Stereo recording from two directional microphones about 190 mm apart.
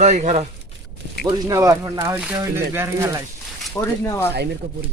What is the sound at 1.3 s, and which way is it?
Speech, 20° right (ahead or behind).